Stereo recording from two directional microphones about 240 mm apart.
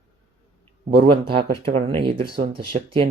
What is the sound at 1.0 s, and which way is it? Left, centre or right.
Speech, right.